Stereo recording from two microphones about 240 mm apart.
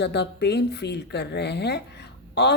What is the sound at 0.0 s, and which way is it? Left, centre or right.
A woman's voice, left.